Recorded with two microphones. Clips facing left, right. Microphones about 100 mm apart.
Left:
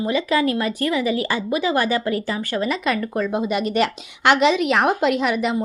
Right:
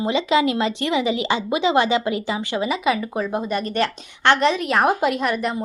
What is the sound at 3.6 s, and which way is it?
A woman's voice, 10° left (ahead or behind).